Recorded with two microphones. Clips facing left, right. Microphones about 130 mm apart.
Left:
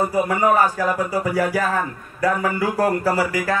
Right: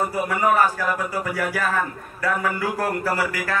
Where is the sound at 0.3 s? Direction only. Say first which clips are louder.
Even; 35° left (ahead or behind).